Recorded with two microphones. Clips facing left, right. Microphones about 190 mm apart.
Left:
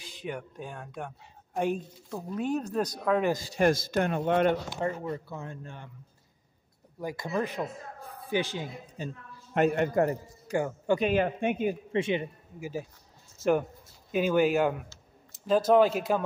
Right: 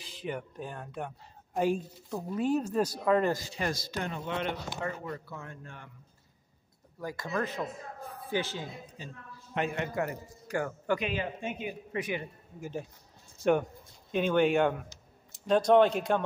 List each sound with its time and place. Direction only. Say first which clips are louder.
0.0 s speech: even; centre (ahead or behind)
3.5 s speech: left 9 dB; 50° left (ahead or behind)
4.8 s a man's voice: left 5 dB; 25° left (ahead or behind)
7.0 s speech: left 2 dB; 15° left (ahead or behind)
8.9 s a man's voice: left 7 dB; 50° left (ahead or behind)
10.5 s a man's voice: left 4 dB; 20° left (ahead or behind)
11.0 s speech: left 8 dB; 45° left (ahead or behind)
11.9 s a man's voice: left 3 dB; 25° left (ahead or behind)
12.5 s speech: left 2 dB; 10° left (ahead or behind)